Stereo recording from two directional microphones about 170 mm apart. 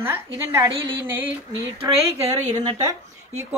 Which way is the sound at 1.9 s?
35° right (ahead or behind).